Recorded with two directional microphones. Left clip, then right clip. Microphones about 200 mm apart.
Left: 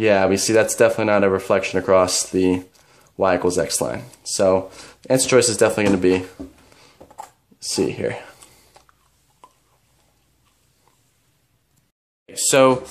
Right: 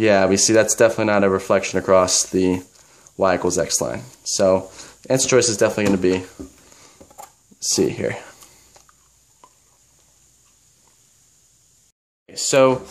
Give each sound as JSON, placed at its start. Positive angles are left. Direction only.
{"t": 0.0, "sound": "speech", "side_deg": -5}
{"t": 7.5, "sound": "a sound", "side_deg": -10}
{"t": 12.3, "sound": "speech", "side_deg": -10}